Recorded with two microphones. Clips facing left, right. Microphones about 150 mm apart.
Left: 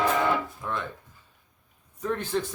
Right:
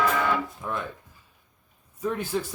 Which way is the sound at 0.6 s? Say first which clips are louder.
Even; 10° right (ahead or behind).